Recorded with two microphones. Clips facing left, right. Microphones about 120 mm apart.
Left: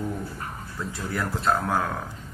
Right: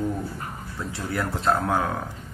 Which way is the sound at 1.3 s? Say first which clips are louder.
Right 1 dB; 25° right (ahead or behind).